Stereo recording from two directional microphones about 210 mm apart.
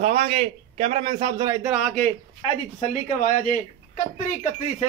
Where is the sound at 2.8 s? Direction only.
35° left (ahead or behind).